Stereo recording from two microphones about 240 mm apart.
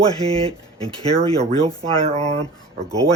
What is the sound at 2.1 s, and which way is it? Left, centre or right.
Speech, right.